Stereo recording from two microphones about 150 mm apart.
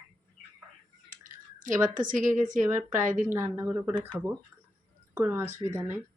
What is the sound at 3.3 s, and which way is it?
Speech, 10° right (ahead or behind).